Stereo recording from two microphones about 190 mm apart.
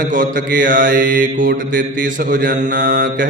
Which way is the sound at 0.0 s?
45° right (ahead or behind).